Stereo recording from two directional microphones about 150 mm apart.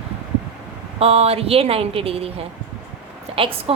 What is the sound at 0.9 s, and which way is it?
A woman's voice, 45° right (ahead or behind).